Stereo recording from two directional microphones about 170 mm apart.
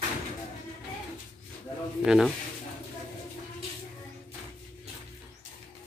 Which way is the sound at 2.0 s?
Centre (ahead or behind).